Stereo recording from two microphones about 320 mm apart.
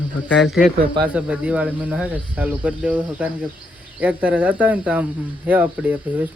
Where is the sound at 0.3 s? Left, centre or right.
Centre.